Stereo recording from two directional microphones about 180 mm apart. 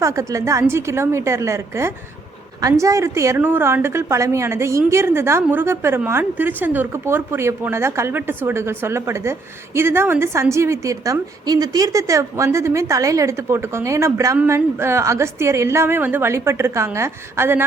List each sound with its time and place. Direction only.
0.0 s a woman's voice: 20° right (ahead or behind)